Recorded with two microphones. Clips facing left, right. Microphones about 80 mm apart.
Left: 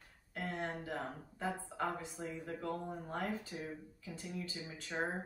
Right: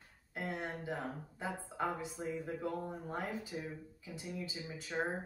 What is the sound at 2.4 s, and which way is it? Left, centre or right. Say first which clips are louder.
Speech: right 2 dB; centre.